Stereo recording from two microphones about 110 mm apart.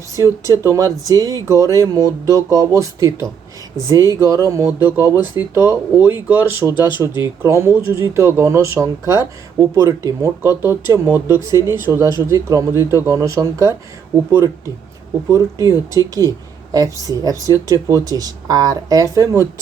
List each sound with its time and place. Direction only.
0.2 s speech: 30° right (ahead or behind)